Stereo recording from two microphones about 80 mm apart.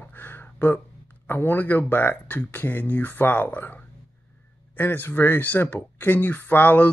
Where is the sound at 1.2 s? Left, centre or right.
Left.